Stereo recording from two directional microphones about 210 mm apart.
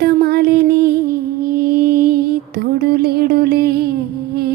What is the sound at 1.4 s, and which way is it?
Music, 45° right (ahead or behind).